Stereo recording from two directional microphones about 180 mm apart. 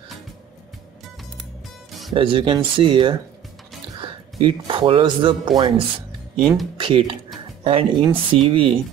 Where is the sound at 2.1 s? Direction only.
30° right (ahead or behind).